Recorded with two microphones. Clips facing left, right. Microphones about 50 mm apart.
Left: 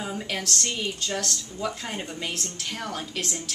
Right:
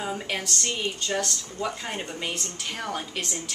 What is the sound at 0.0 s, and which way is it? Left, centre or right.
A woman's voice, centre.